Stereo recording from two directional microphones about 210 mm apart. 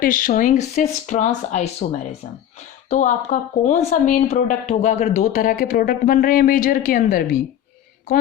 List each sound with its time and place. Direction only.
0.0 s speech: 40° left (ahead or behind)
2.9 s speech: 35° left (ahead or behind)